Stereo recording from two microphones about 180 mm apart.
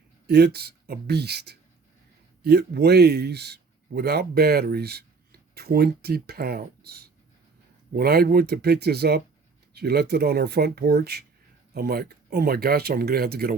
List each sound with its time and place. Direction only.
0.3 s speech: 60° right (ahead or behind)